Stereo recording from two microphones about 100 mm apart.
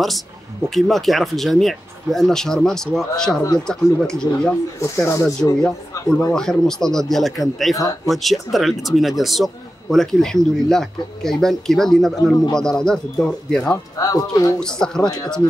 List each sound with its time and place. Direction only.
0.7 s a man's voice: centre (ahead or behind)
4.7 s speech: 30° left (ahead or behind)
5.4 s a man's voice: 5° left (ahead or behind)
7.7 s speech: 35° left (ahead or behind)
8.1 s a man's voice: centre (ahead or behind)
13.9 s speech: 35° left (ahead or behind)
14.6 s speech: 5° left (ahead or behind)